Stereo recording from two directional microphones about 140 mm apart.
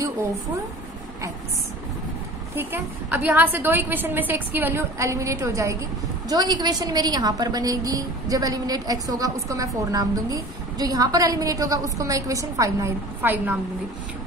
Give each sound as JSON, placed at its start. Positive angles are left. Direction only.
{"t": 2.5, "sound": "a woman's voice", "side_deg": -15}